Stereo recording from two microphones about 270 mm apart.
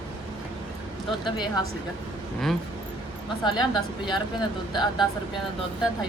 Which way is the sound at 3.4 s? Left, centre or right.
Centre.